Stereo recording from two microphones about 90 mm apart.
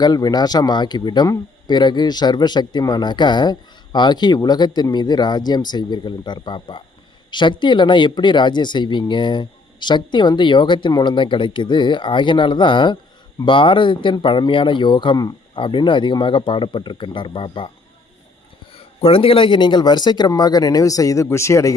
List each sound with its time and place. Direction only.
0.0 s speech: 50° left (ahead or behind); by 17.7 s 75° left (ahead or behind)
18.7 s speech: 90° left; by 21.8 s 35° left (ahead or behind)